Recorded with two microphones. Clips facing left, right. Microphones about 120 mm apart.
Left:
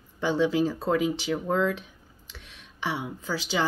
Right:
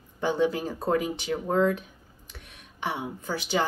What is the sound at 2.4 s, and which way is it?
A woman's voice, 50° right (ahead or behind).